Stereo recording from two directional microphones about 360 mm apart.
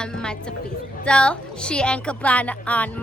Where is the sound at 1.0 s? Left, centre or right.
Centre.